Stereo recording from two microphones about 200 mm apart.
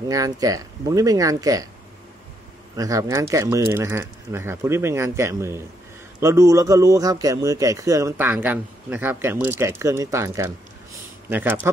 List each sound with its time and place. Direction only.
0.1 s speech: 15° right (ahead or behind)
2.7 s speech: 15° right (ahead or behind)